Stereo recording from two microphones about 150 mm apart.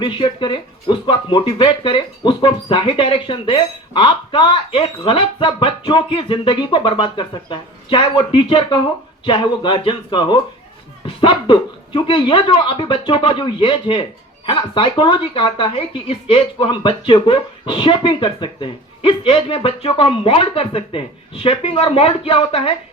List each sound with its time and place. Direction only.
0.0 s speech: 35° left (ahead or behind)